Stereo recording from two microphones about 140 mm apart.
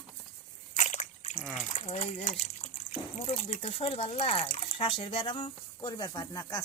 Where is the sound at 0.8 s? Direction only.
60° left (ahead or behind).